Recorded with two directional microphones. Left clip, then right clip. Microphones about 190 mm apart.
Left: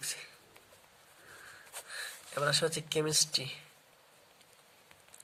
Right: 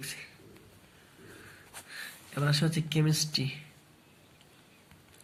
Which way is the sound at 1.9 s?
55° left (ahead or behind).